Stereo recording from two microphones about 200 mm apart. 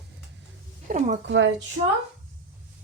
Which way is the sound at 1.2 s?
65° right (ahead or behind).